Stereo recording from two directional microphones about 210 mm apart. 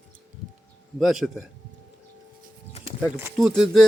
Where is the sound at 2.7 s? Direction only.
30° left (ahead or behind).